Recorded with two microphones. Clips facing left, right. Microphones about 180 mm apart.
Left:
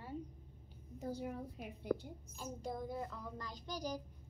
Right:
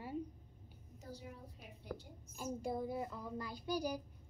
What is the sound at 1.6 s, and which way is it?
Speech, 55° left (ahead or behind).